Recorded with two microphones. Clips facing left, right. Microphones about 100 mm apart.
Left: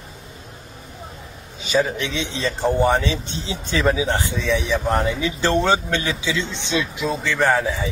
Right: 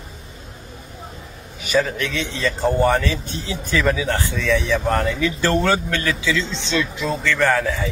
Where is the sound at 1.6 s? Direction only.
20° left (ahead or behind).